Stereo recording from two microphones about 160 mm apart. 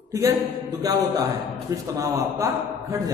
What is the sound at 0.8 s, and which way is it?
A man's voice, 20° right (ahead or behind).